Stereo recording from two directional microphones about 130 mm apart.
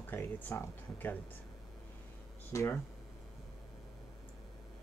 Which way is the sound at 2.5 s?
20° left (ahead or behind).